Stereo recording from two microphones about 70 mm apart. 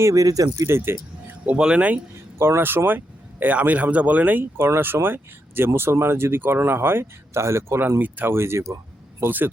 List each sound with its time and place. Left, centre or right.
0.0 s speech: right
1.5 s speech: centre
2.4 s speech: right
7.8 s speech: right